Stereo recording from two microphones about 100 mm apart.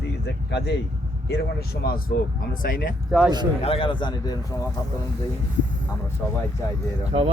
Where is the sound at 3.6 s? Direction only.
70° left (ahead or behind); by 4.3 s 50° left (ahead or behind).